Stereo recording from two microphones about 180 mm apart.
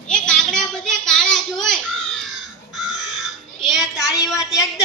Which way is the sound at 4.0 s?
20° left (ahead or behind).